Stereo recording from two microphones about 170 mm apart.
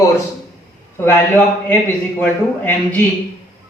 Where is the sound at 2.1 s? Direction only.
10° left (ahead or behind).